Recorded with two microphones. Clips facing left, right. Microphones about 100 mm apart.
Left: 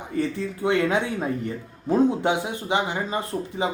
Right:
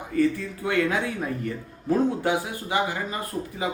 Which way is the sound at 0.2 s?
25° left (ahead or behind).